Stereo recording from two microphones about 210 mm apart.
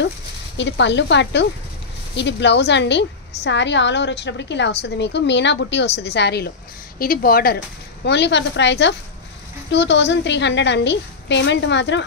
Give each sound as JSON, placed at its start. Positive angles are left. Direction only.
{"t": 0.6, "sound": "a woman's voice", "side_deg": 55}